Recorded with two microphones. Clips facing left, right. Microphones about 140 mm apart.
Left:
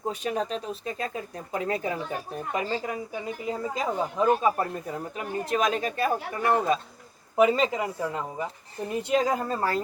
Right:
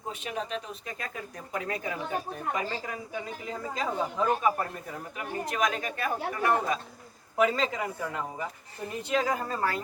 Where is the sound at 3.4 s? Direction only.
20° left (ahead or behind).